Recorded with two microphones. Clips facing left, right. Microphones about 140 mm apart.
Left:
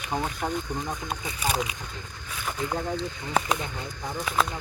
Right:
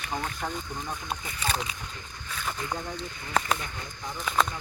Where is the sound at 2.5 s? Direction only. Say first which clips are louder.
Left 3 dB; 10° left (ahead or behind).